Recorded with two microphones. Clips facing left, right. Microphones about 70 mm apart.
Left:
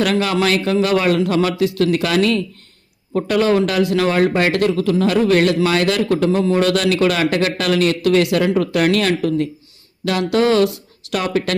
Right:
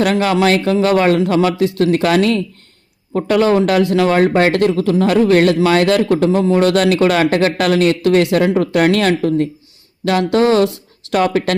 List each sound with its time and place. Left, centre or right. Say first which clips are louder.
0.0 s speech: right 3 dB; right